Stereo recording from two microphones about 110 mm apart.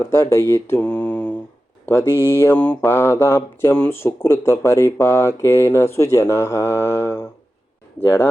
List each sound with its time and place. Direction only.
0.0 s speech: 25° left (ahead or behind)